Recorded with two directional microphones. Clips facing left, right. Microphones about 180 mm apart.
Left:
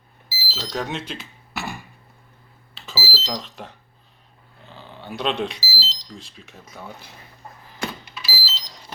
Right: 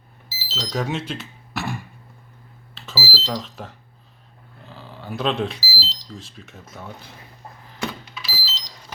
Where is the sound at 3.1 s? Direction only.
Centre (ahead or behind).